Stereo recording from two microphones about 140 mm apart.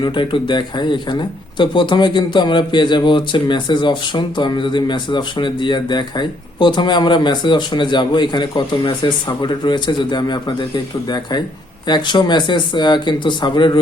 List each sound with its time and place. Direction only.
0.0 s speech: 35° left (ahead or behind)